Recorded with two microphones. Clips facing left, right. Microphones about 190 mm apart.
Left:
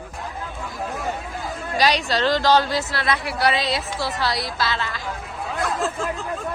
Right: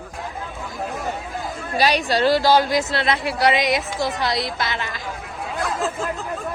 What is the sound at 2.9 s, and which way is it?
A woman's voice, 25° right (ahead or behind).